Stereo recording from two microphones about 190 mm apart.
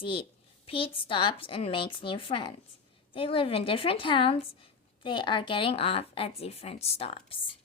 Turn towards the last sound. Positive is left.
turn(degrees=30)  # may be behind; listen again after turning